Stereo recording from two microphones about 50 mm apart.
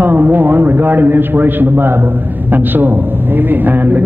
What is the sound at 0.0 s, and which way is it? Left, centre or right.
A man's voice, right.